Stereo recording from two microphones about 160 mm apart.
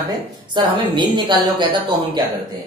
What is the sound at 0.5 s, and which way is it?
A woman's voice, 30° right (ahead or behind).